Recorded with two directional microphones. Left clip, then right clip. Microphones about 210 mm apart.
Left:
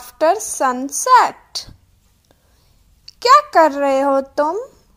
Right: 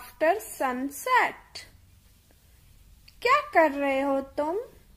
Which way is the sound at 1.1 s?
20° left (ahead or behind).